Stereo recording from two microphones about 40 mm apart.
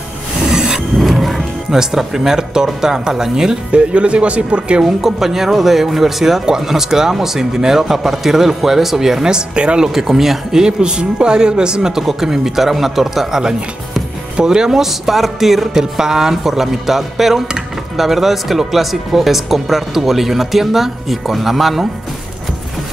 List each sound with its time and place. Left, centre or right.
0.5 s rub: centre
0.9 s music: centre
1.8 s speech: centre
3.7 s speech: right
4.8 s speech: centre
9.9 s speech: centre
10.6 s speech: right
14.3 s speech: centre
15.7 s speech: centre